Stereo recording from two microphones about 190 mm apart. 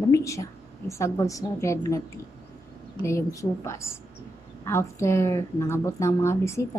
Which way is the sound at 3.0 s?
15° left (ahead or behind).